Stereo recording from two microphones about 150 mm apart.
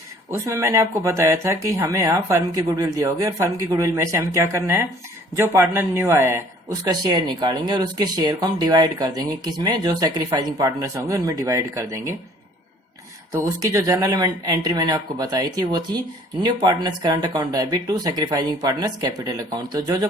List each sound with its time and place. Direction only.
0.3 s speech: 20° right (ahead or behind)
13.3 s speech: 20° right (ahead or behind)